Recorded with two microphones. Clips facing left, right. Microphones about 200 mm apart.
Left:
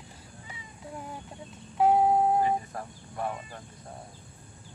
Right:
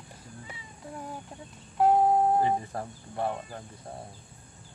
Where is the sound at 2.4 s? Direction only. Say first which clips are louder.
Right 1 dB; 30° right (ahead or behind).